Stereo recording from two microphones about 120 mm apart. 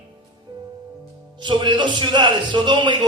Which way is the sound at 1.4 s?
40° right (ahead or behind).